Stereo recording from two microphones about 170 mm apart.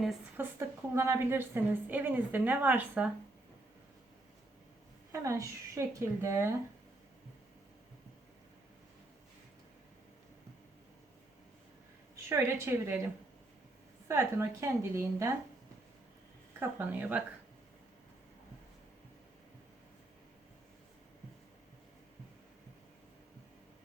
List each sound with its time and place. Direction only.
0.4 s a woman's voice: 10° right (ahead or behind)
5.1 s a woman's voice: 20° right (ahead or behind)
12.1 s a woman's voice: 15° right (ahead or behind)
14.1 s a woman's voice: 15° right (ahead or behind)
16.6 s a woman's voice: 10° right (ahead or behind)